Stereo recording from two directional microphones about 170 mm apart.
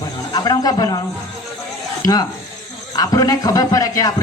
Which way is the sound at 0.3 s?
20° left (ahead or behind).